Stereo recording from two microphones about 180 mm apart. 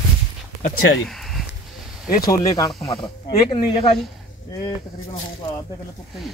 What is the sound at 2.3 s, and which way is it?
Speech, 20° left (ahead or behind).